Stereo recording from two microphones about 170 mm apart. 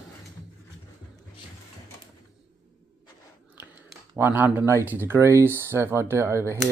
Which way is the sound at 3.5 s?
10° right (ahead or behind).